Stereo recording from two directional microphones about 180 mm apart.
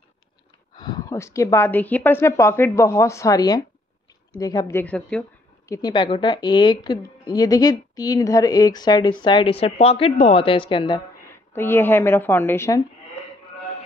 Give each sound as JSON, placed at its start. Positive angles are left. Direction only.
{"t": 0.7, "sound": "speech", "side_deg": 25}
{"t": 5.7, "sound": "a woman's voice", "side_deg": 20}
{"t": 11.2, "sound": "a woman's voice", "side_deg": 10}